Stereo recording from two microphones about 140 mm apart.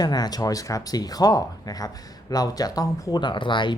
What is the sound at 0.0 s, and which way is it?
Speech, 30° left (ahead or behind).